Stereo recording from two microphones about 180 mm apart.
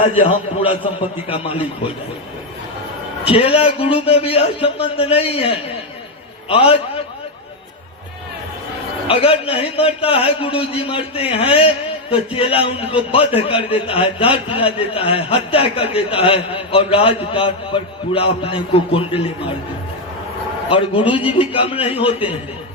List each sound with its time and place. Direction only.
0.2 s a man's voice: 30° left (ahead or behind)
3.2 s a man's voice: 30° left (ahead or behind)
9.0 s a man's voice: 30° left (ahead or behind)
20.7 s a man's voice: 30° left (ahead or behind)